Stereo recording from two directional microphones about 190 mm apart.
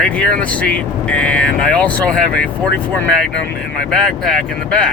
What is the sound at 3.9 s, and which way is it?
Speech, 5° left (ahead or behind).